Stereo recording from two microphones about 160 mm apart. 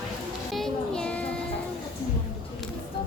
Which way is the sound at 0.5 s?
5° left (ahead or behind).